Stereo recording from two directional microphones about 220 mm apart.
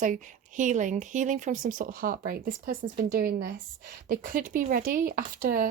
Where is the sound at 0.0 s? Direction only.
35° right (ahead or behind).